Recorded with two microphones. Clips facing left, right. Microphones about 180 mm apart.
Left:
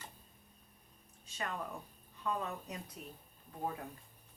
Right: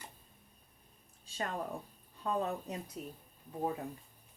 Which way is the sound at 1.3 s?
35° right (ahead or behind).